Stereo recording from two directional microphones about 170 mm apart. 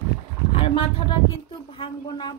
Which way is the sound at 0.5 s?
35° left (ahead or behind).